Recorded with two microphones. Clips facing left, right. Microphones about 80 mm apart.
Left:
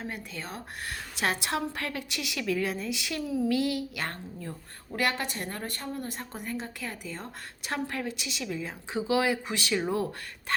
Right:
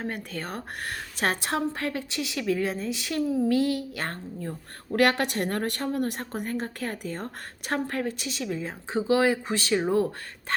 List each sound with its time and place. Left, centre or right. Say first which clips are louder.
0.0 s a woman's voice: right 5 dB; right
4.9 s a woman's voice: right 7 dB; right